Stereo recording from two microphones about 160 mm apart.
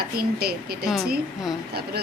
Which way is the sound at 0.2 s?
75° right (ahead or behind).